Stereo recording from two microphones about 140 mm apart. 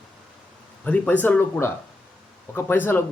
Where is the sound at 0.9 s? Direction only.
10° left (ahead or behind).